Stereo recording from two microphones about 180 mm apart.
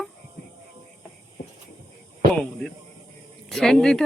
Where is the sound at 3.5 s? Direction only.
5° left (ahead or behind).